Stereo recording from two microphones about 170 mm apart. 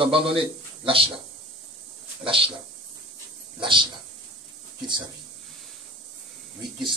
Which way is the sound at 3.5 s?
30° right (ahead or behind).